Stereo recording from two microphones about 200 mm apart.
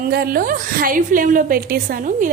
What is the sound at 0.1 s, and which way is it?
A woman's voice, 50° right (ahead or behind).